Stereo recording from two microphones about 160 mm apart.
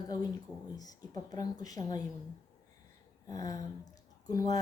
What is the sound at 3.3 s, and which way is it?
Speech, 25° left (ahead or behind).